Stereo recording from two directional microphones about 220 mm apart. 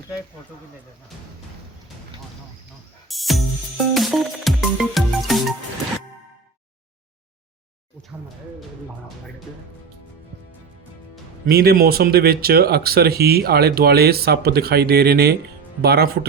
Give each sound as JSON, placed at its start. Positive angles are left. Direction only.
{"t": 3.1, "sound": "music", "side_deg": 0}
{"t": 11.4, "sound": "speech", "side_deg": -45}